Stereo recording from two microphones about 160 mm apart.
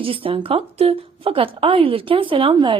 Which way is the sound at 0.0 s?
35° right (ahead or behind).